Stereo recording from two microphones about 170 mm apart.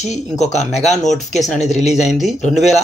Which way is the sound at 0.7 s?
40° left (ahead or behind).